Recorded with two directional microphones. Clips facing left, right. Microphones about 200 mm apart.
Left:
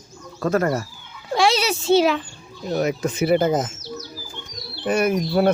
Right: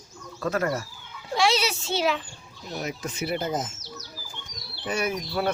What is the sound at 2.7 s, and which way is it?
Speech, 80° left.